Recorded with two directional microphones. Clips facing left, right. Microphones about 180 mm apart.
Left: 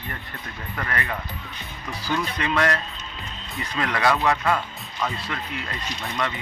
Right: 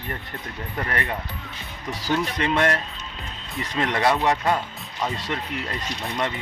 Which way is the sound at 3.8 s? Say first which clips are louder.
Right 1 dB; 25° right (ahead or behind).